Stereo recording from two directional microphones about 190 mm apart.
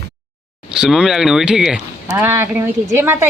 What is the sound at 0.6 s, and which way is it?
Speech, 5° right (ahead or behind).